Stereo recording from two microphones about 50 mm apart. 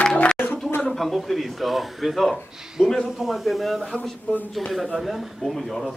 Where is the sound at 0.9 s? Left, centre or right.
Centre.